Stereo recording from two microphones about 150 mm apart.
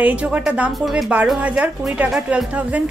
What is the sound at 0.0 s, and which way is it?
Speech, 10° right (ahead or behind).